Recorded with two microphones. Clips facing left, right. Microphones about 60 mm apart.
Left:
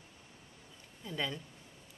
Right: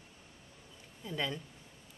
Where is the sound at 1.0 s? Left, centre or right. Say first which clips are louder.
Right 1 dB; centre.